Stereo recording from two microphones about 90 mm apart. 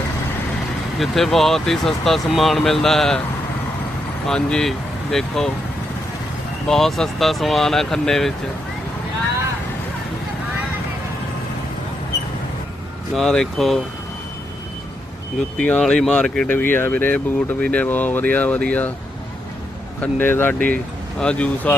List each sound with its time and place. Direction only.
0.9 s speech: centre (ahead or behind)
4.3 s speech: 10° left (ahead or behind)
6.7 s speech: 5° left (ahead or behind)
13.1 s speech: 5° left (ahead or behind)
15.5 s speech: 15° left (ahead or behind)
16.5 s speech: 20° left (ahead or behind)
20.0 s speech: 25° left (ahead or behind)